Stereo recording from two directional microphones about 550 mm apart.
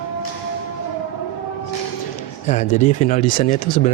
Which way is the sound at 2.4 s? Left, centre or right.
Centre.